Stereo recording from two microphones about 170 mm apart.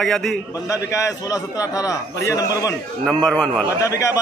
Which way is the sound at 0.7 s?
20° left (ahead or behind).